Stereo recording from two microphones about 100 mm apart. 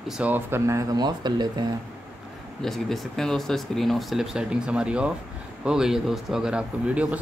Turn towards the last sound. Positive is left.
turn(degrees=-15)  # may be behind; listen again after turning